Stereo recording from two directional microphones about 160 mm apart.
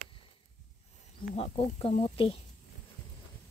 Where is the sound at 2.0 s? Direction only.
35° left (ahead or behind).